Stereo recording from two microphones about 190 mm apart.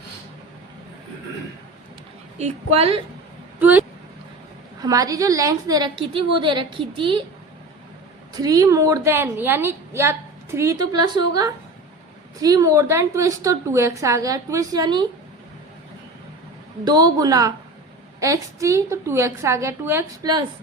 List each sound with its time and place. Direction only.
2.4 s a woman's voice: 30° right (ahead or behind)
3.6 s a woman's voice: 10° right (ahead or behind); by 7.3 s 25° right (ahead or behind)
8.4 s a woman's voice: 20° right (ahead or behind)
16.8 s a woman's voice: 20° right (ahead or behind)